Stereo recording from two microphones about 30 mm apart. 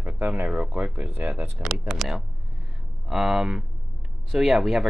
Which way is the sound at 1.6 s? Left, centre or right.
Right.